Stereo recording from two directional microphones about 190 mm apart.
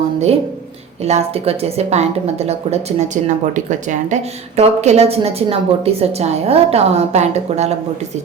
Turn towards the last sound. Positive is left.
turn(degrees=-35)  # may be behind; listen again after turning